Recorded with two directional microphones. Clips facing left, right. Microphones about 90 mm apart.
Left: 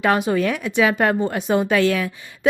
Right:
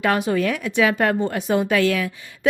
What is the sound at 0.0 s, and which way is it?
A woman's voice, 20° left (ahead or behind).